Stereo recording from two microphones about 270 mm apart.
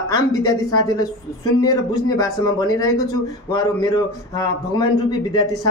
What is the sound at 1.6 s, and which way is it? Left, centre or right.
A man's voice, centre.